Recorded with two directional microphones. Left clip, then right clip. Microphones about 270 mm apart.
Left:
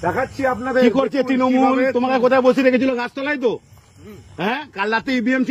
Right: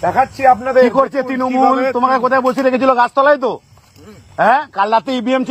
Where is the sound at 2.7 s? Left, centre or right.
Centre.